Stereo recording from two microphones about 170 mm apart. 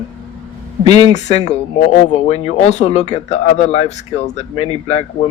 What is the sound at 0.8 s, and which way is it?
Speech, 40° left (ahead or behind).